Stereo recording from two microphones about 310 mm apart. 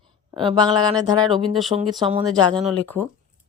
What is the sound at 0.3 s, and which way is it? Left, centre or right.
Speech, centre.